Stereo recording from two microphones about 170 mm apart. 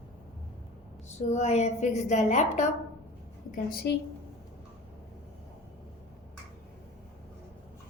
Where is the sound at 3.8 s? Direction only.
80° left.